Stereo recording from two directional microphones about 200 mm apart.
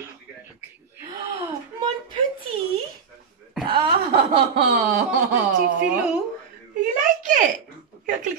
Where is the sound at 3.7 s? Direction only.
25° right (ahead or behind).